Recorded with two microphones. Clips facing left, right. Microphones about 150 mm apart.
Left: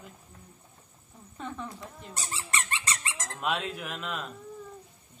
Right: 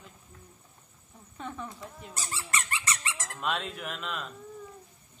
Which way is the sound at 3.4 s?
5° left (ahead or behind).